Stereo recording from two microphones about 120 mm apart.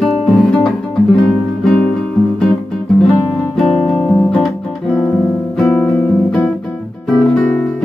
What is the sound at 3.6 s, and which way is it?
Music, centre (ahead or behind).